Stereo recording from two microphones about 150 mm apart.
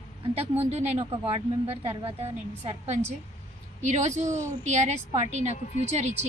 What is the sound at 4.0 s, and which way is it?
A woman's voice, 50° right (ahead or behind).